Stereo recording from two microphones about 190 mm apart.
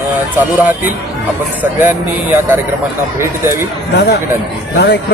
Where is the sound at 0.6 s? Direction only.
10° right (ahead or behind).